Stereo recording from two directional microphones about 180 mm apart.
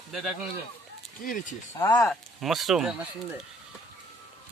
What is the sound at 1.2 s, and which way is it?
Speech, 50° left (ahead or behind).